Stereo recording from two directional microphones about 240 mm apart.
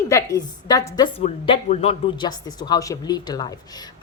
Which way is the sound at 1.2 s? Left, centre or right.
Left.